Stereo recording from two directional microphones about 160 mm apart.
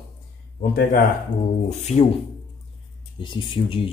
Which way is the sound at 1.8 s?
45° left (ahead or behind).